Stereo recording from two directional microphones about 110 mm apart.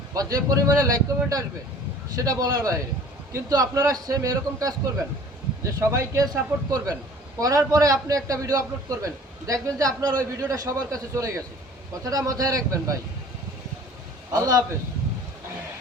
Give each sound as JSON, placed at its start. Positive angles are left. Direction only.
{"t": 0.1, "sound": "a man's voice", "side_deg": -30}
{"t": 5.8, "sound": "a man's voice", "side_deg": -25}
{"t": 14.3, "sound": "a man's voice", "side_deg": -35}